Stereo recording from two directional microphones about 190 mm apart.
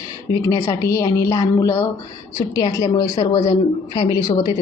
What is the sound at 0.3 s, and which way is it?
A woman's voice, 15° left (ahead or behind).